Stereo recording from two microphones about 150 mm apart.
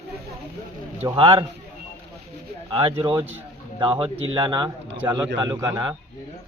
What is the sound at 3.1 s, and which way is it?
Speech, 10° right (ahead or behind).